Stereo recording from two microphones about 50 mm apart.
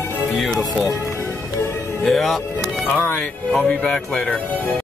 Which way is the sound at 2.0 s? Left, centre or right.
Centre.